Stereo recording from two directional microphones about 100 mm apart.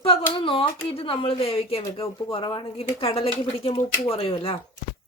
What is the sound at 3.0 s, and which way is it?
Speech, 70° left (ahead or behind).